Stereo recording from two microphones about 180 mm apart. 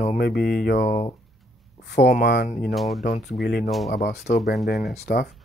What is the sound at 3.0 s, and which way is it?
Speech, 70° left (ahead or behind).